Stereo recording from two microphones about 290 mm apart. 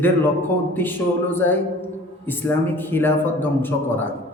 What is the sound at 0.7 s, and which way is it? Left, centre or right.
A man's voice, centre.